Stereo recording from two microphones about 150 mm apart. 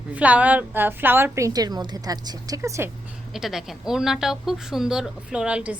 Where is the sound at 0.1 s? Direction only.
10° right (ahead or behind).